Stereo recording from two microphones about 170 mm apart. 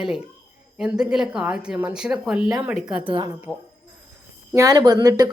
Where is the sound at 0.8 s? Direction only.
5° right (ahead or behind).